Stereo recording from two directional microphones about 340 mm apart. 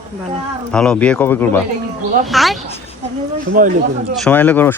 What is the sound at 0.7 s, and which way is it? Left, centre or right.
Speech, centre.